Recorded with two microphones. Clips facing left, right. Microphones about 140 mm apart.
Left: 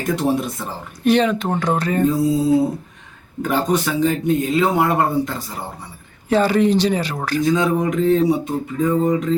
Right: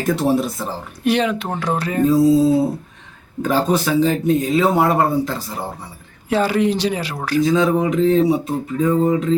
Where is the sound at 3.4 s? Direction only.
35° right (ahead or behind).